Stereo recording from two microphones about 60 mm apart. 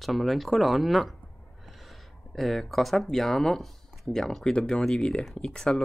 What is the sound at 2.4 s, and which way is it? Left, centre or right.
Speech, centre.